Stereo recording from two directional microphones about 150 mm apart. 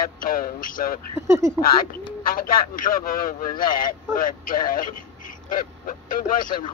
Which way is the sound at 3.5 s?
30° left (ahead or behind).